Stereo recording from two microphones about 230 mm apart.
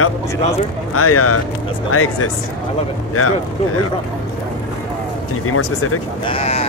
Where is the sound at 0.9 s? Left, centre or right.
Left.